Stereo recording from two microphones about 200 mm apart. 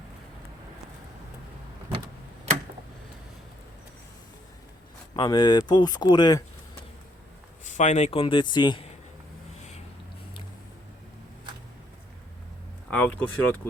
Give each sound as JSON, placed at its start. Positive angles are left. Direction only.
{"t": 5.1, "sound": "a man's voice", "side_deg": 20}
{"t": 7.6, "sound": "a man's voice", "side_deg": 40}
{"t": 12.9, "sound": "speech", "side_deg": 5}